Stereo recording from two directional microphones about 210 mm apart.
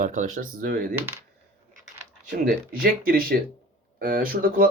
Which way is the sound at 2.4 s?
45° right (ahead or behind).